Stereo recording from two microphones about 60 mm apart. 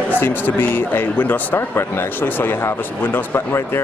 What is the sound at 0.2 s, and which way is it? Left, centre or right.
Speech, left.